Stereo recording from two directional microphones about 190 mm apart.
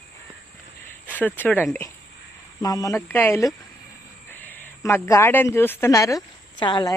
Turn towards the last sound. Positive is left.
turn(degrees=25)  # may be behind; listen again after turning